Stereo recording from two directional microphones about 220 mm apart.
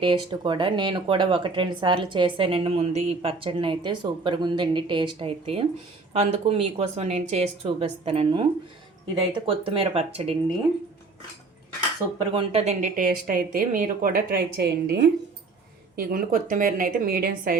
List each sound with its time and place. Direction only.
0.0 s speech: 20° right (ahead or behind)
12.3 s speech: 25° right (ahead or behind)